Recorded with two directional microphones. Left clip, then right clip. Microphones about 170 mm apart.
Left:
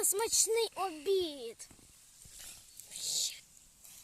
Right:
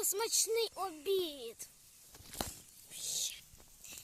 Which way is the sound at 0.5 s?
30° left (ahead or behind).